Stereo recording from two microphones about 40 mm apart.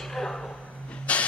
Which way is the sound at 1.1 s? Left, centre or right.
Left.